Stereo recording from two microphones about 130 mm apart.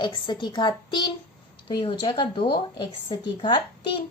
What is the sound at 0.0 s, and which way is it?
A woman's voice, 35° left (ahead or behind).